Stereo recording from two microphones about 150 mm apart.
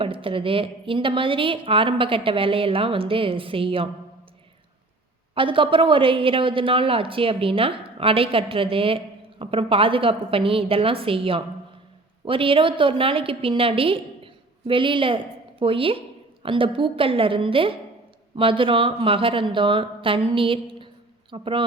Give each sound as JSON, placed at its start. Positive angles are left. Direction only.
{"t": 0.0, "sound": "a woman's voice", "side_deg": -35}
{"t": 5.3, "sound": "a woman's voice", "side_deg": -35}